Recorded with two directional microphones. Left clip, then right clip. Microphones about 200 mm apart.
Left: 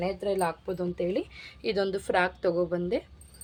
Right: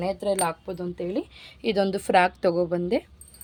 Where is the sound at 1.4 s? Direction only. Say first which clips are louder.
Right 8 dB; 35° right (ahead or behind).